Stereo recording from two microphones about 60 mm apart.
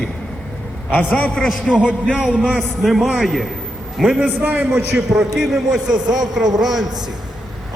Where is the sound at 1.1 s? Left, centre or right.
Centre.